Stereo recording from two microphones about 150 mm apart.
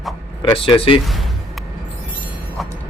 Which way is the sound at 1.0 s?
Centre (ahead or behind).